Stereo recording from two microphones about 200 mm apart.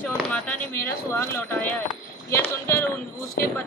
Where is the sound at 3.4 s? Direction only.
50° left (ahead or behind).